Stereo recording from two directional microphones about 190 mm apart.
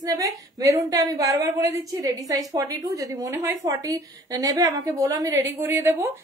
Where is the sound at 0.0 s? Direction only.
20° right (ahead or behind).